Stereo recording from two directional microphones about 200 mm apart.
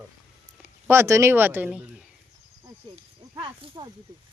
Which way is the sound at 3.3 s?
25° right (ahead or behind).